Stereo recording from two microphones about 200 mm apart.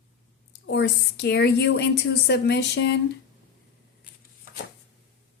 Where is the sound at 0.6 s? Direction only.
60° left (ahead or behind).